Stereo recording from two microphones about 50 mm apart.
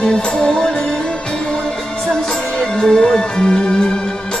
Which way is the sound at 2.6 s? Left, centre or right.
Centre.